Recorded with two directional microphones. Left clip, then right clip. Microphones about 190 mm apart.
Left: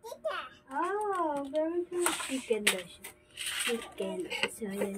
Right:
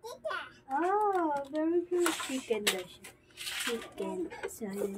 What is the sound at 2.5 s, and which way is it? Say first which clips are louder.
Speech: left 2 dB; 10° right (ahead or behind).